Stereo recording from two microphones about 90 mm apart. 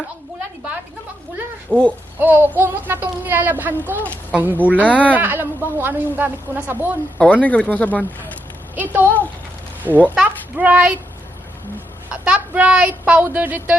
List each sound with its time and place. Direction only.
1.7 s speech: 15° left (ahead or behind)
2.1 s a woman's voice: 20° right (ahead or behind)
7.4 s speech: 15° left (ahead or behind)
8.7 s a woman's voice: 20° right (ahead or behind)
12.2 s a woman's voice: 15° right (ahead or behind)